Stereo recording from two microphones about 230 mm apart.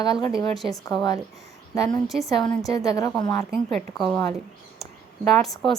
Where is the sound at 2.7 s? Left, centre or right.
Centre.